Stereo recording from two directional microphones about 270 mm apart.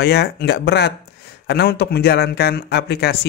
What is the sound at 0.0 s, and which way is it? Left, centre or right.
Speech, left.